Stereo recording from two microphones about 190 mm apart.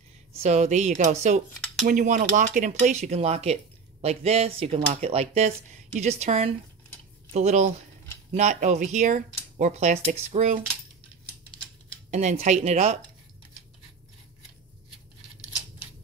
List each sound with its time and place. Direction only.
0.4 s speech: 35° right (ahead or behind)
12.1 s speech: 40° right (ahead or behind)